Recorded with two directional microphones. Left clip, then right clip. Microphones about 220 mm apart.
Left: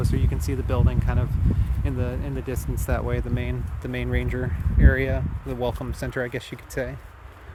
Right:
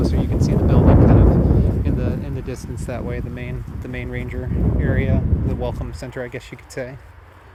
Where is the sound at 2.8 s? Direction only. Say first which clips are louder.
Even; 15° left (ahead or behind).